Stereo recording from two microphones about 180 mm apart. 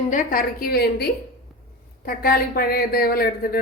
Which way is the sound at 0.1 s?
50° left (ahead or behind).